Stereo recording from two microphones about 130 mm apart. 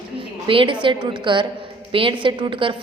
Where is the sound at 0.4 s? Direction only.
40° right (ahead or behind).